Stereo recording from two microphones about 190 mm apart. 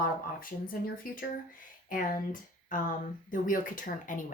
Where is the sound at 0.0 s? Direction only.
50° left (ahead or behind).